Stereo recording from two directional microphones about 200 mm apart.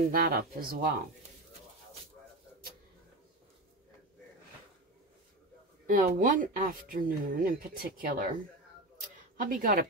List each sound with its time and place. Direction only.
0.1 s speech: 50° right (ahead or behind)
5.9 s speech: 45° right (ahead or behind)
9.4 s speech: 45° right (ahead or behind)